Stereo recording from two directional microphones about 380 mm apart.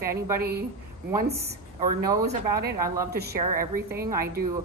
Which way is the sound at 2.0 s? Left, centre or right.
Centre.